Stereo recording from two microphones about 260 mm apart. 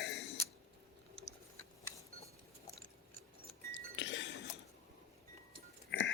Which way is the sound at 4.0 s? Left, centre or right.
Left.